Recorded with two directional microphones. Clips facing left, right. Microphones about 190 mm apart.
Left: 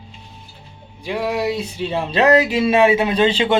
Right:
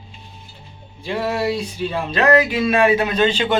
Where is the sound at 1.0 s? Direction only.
15° left (ahead or behind).